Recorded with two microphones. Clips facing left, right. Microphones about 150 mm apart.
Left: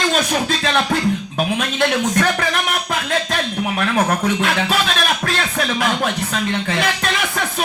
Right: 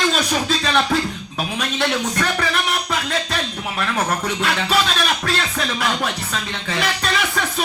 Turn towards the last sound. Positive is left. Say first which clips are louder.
# even
turn(degrees=50)  # may be behind; listen again after turning